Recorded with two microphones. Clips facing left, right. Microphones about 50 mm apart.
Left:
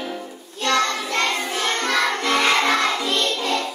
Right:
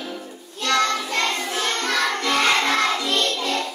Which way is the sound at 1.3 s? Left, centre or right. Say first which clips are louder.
Left 1 dB; centre.